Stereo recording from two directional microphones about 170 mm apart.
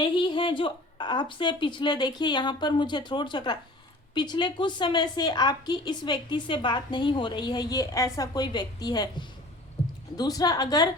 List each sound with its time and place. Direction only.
0.0 s a woman's voice: 30° left (ahead or behind)